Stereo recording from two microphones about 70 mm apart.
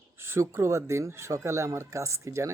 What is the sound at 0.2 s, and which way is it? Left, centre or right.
Speech, right.